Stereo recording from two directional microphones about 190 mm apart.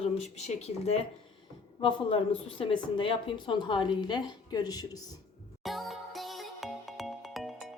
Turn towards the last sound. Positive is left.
turn(degrees=0)  # may be behind; listen again after turning